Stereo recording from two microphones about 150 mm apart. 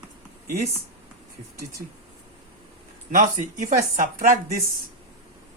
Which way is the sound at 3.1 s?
55° right (ahead or behind).